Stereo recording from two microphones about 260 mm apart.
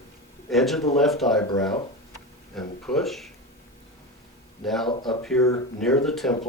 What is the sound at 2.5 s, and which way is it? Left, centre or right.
Speech, centre.